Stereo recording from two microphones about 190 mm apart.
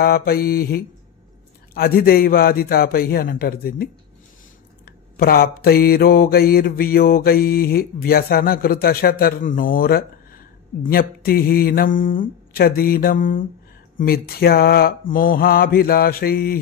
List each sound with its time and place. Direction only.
0.0 s speech: 55° left (ahead or behind)